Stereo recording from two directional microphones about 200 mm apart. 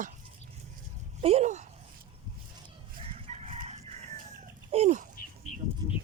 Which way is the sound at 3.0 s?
30° right (ahead or behind).